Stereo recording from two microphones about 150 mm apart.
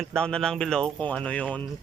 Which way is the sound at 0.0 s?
5° left (ahead or behind).